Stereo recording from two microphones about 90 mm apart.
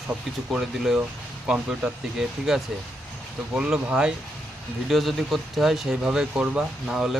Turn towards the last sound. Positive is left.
turn(degrees=-5)  # may be behind; listen again after turning